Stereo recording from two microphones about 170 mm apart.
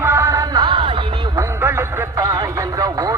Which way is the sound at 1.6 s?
15° right (ahead or behind).